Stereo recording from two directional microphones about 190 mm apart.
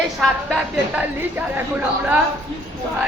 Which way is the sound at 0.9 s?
10° right (ahead or behind).